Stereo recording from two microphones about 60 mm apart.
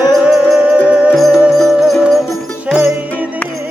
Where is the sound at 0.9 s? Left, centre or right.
Centre.